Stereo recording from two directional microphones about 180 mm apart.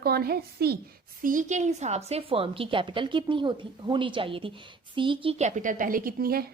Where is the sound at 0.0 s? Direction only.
60° right (ahead or behind).